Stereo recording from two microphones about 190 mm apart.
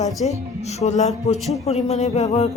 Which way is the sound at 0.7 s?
35° left (ahead or behind).